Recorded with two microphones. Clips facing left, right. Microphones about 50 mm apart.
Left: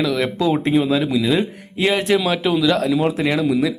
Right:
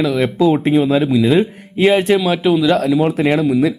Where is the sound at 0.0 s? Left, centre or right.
Centre.